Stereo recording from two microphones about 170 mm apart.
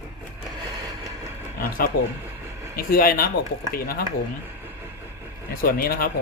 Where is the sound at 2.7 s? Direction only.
60° left (ahead or behind).